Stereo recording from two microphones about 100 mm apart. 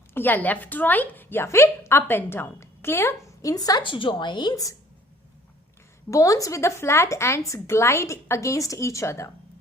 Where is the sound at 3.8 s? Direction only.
55° left (ahead or behind).